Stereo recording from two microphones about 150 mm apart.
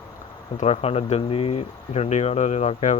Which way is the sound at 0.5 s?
50° left (ahead or behind).